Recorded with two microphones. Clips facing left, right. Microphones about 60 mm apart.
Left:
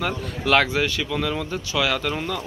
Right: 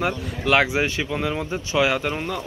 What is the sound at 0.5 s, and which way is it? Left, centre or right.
Speech, centre.